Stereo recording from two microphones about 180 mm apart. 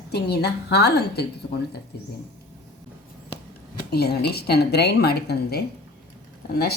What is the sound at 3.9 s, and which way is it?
Speech, 65° left (ahead or behind).